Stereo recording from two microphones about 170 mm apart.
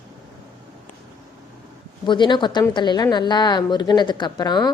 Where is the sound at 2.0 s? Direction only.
25° left (ahead or behind).